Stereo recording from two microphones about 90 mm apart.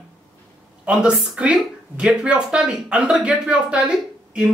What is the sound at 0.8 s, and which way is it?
Speech, 10° right (ahead or behind).